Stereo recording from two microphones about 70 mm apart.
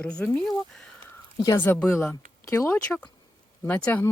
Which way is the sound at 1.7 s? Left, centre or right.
Left.